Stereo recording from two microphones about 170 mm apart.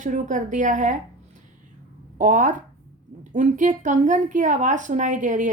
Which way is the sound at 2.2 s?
50° right (ahead or behind).